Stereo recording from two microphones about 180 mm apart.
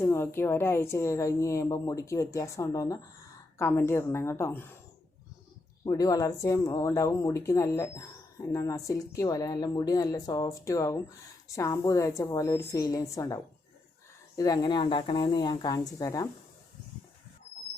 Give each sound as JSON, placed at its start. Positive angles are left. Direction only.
{"t": 0.0, "sound": "speech", "side_deg": 15}
{"t": 5.8, "sound": "speech", "side_deg": 20}